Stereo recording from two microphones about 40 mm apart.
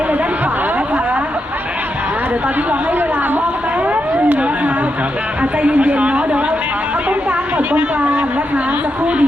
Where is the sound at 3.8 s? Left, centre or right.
Right.